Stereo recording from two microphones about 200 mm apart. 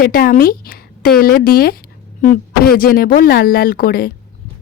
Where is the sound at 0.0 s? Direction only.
45° left (ahead or behind).